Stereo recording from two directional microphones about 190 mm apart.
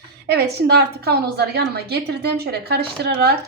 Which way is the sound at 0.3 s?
60° right (ahead or behind).